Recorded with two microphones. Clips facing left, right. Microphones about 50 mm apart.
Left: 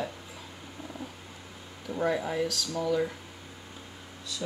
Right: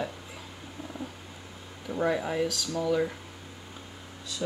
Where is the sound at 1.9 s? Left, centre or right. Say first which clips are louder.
Right 1 dB; centre.